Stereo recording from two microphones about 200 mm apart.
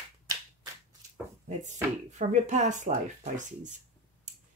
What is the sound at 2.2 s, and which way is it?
Speech, 35° right (ahead or behind).